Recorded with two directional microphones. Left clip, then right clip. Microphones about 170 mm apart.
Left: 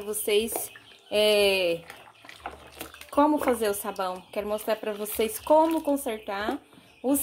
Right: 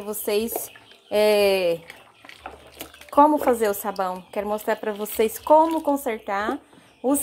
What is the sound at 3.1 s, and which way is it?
A woman's voice, 15° right (ahead or behind).